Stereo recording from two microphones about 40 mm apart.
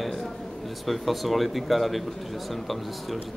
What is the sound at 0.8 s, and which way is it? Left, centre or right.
A man's voice, centre.